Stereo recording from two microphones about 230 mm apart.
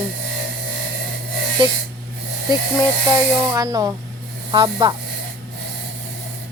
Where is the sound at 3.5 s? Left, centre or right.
Centre.